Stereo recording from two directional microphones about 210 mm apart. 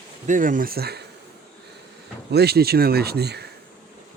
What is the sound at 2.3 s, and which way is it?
Speech, 50° right (ahead or behind).